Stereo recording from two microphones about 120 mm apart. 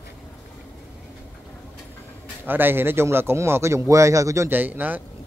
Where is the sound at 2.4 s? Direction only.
15° right (ahead or behind).